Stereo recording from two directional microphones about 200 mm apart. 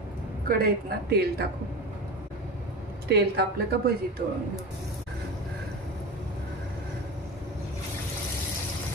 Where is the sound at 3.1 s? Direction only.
55° right (ahead or behind).